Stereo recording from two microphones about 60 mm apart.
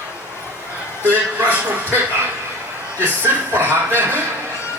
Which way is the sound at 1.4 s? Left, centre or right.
Right.